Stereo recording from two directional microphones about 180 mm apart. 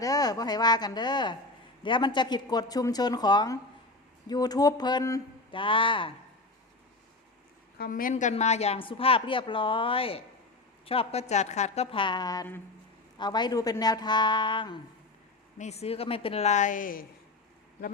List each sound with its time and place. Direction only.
0.0 s speech: 20° left (ahead or behind)
7.8 s speech: 50° left (ahead or behind); by 14.8 s 25° left (ahead or behind)
15.5 s speech: 40° left (ahead or behind)